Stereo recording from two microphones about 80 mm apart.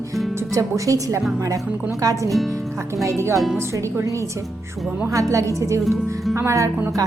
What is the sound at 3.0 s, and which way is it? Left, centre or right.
A woman's voice, right.